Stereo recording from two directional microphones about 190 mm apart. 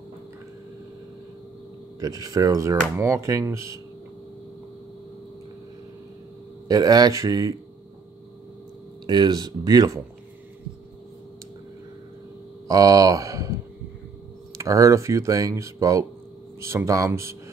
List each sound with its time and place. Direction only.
2.0 s speech: 20° right (ahead or behind)
6.7 s speech: 20° right (ahead or behind)
9.0 s speech: 20° right (ahead or behind)
12.6 s speech: 20° right (ahead or behind)
14.6 s speech: 15° right (ahead or behind)